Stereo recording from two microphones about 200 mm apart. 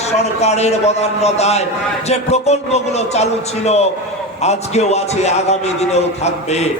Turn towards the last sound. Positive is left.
turn(degrees=35)  # may be behind; listen again after turning